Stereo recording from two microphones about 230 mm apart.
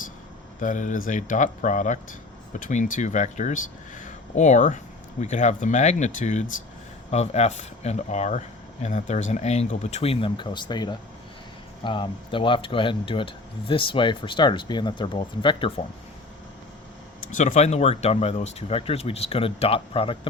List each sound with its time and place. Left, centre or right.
0.6 s speech: left
17.3 s speech: left